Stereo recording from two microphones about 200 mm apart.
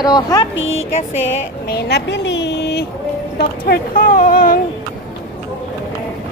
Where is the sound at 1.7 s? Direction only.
55° left (ahead or behind).